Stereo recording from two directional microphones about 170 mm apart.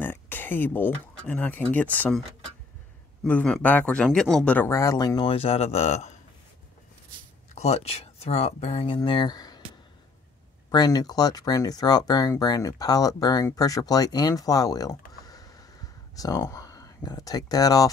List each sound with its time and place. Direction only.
0.0 s speech: 10° left (ahead or behind)
3.3 s speech: 5° left (ahead or behind); by 6.1 s 40° left (ahead or behind)
7.5 s speech: 40° left (ahead or behind)
10.7 s speech: 25° left (ahead or behind)